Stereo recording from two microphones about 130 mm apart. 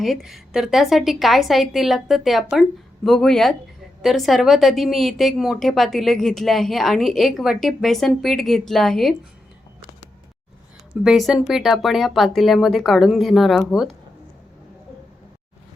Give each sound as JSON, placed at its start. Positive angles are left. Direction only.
{"t": 0.0, "sound": "speech", "side_deg": 0}
{"t": 11.0, "sound": "speech", "side_deg": -5}